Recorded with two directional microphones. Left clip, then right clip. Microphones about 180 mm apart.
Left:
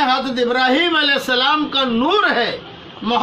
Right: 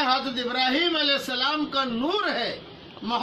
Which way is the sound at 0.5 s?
10° right (ahead or behind).